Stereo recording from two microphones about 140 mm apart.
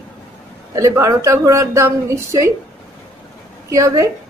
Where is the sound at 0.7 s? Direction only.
20° right (ahead or behind).